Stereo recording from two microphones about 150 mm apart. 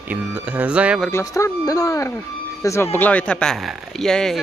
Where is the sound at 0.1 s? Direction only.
10° right (ahead or behind).